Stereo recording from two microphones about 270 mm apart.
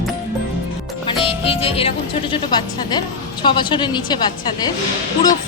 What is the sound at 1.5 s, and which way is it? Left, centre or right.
A woman's voice, left.